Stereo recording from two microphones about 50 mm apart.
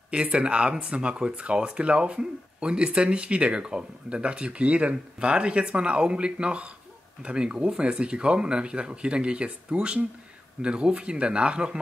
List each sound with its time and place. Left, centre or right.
0.1 s speech: right